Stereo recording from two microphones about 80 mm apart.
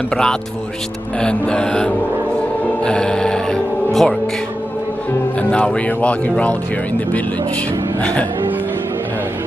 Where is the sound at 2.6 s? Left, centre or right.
Centre.